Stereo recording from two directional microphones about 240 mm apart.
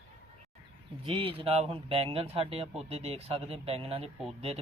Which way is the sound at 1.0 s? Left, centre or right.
Right.